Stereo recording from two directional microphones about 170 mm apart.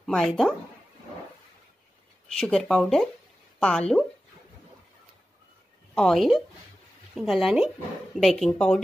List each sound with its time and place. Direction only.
0.0 s speech: centre (ahead or behind)
2.3 s speech: 5° left (ahead or behind)
5.9 s speech: centre (ahead or behind)